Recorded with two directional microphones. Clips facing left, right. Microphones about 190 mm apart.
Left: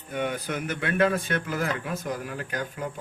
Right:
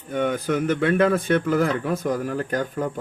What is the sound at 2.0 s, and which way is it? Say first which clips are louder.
Speech: right 8 dB; 45° right (ahead or behind).